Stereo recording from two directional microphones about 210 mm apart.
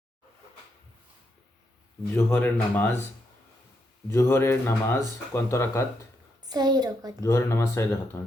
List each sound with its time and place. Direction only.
2.1 s speech: 10° left (ahead or behind)
4.1 s speech: 15° left (ahead or behind)
6.5 s a child's voice: 20° right (ahead or behind)
7.2 s speech: 15° left (ahead or behind)